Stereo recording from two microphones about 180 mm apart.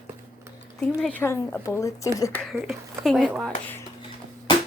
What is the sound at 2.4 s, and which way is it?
Speech, centre (ahead or behind).